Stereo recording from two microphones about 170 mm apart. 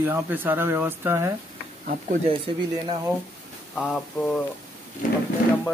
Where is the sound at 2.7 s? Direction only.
30° right (ahead or behind).